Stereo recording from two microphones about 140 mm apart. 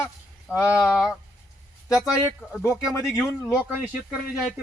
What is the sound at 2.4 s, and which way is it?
Speech, 10° left (ahead or behind).